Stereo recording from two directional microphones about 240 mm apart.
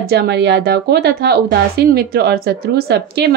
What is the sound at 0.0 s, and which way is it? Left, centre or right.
Speech, right.